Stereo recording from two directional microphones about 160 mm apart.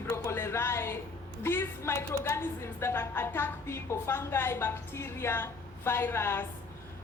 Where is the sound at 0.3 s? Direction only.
15° left (ahead or behind).